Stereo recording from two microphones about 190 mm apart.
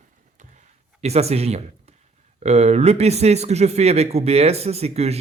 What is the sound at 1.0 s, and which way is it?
Speech, 35° right (ahead or behind).